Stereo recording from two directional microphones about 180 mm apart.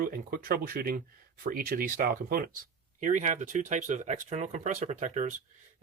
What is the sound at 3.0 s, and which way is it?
Speech, 45° right (ahead or behind).